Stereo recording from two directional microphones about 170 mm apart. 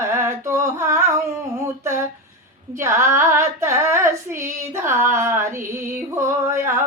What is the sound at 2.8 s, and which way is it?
Female singing, 15° right (ahead or behind).